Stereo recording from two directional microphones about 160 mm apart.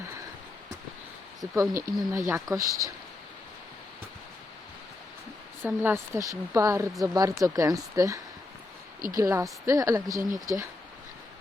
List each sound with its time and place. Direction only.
1.7 s speech: 20° right (ahead or behind)
5.6 s speech: 15° right (ahead or behind)